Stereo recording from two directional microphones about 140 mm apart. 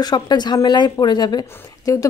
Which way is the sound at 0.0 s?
30° left (ahead or behind).